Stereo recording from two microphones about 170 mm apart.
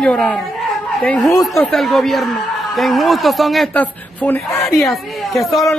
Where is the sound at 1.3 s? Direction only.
15° left (ahead or behind).